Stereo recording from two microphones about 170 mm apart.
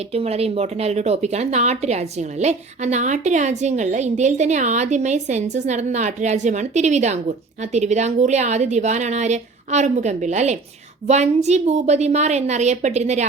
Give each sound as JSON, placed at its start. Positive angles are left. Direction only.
{"t": 0.1, "sound": "a woman's voice", "side_deg": -35}